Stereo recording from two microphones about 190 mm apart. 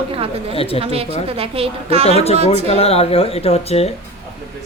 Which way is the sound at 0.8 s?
30° right (ahead or behind).